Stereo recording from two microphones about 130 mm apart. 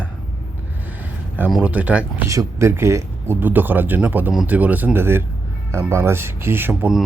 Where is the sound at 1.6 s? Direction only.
10° right (ahead or behind).